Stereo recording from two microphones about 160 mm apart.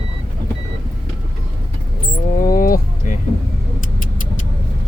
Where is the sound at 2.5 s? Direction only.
60° left (ahead or behind).